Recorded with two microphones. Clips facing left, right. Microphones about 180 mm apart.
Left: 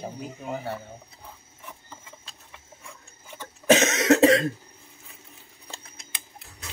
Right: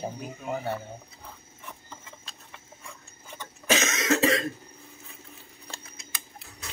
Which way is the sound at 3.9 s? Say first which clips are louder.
Left 6 dB; 70° left (ahead or behind).